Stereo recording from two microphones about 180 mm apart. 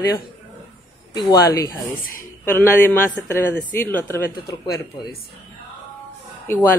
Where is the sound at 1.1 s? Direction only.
20° left (ahead or behind).